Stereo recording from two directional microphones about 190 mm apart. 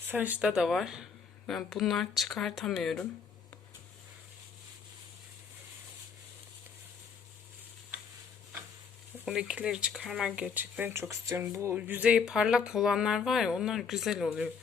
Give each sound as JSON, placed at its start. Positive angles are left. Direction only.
{"t": 0.1, "sound": "speech", "side_deg": -10}
{"t": 9.2, "sound": "speech", "side_deg": -5}